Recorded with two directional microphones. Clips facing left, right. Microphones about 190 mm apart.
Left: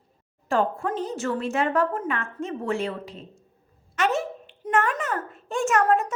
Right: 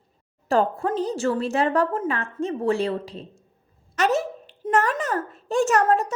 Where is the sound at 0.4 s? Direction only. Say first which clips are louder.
Right 3 dB; 35° right (ahead or behind).